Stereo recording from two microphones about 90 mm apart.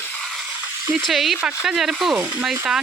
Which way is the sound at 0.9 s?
Centre (ahead or behind).